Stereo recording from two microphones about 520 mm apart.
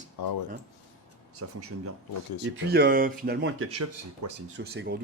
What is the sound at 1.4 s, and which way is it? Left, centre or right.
Speech, right.